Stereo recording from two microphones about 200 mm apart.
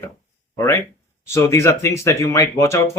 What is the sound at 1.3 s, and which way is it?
Speech, 15° left (ahead or behind).